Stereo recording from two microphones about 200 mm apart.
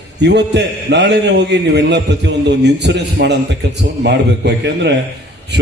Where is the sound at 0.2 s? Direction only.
60° right (ahead or behind).